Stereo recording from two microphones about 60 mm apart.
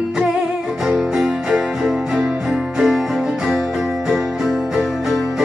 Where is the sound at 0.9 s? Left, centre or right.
Centre.